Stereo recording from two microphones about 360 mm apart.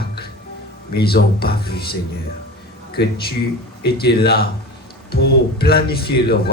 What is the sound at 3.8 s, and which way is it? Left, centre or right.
A man's voice, left.